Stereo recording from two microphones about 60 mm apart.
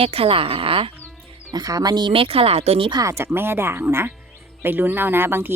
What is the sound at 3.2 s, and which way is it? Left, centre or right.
Speech, right.